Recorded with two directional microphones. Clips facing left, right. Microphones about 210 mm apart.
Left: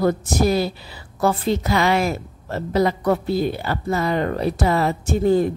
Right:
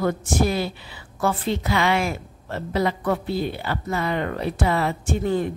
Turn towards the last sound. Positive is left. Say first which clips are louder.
# left 5 dB
turn(degrees=40)  # may be behind; listen again after turning